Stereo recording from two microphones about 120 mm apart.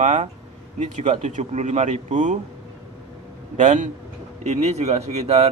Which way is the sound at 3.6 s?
90° right.